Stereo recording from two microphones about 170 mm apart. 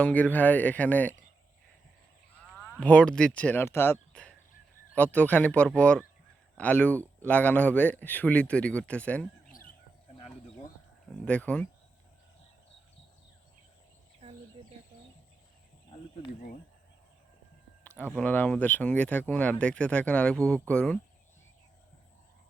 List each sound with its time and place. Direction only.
0.0 s speech: 10° left (ahead or behind)
2.6 s speech: 10° left (ahead or behind)
9.5 s bird: 55° left (ahead or behind)
11.3 s speech: 5° left (ahead or behind)
17.8 s speech: 10° left (ahead or behind)